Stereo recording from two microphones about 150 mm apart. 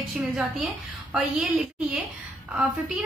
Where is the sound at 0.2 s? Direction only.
Centre (ahead or behind).